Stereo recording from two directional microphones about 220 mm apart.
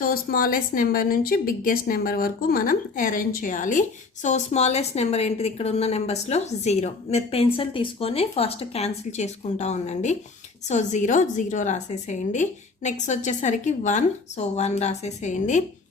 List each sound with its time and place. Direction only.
0.0 s a woman's voice: 45° left (ahead or behind)